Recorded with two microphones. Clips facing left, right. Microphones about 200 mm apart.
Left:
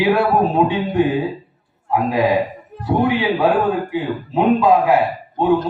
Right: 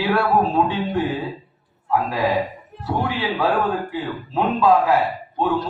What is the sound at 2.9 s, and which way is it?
A man's voice, 15° left (ahead or behind).